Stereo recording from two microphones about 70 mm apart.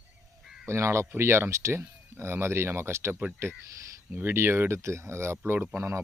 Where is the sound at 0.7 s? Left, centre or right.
Right.